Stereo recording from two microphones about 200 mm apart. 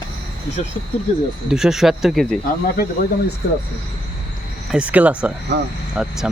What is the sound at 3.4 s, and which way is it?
Speech, 50° left (ahead or behind).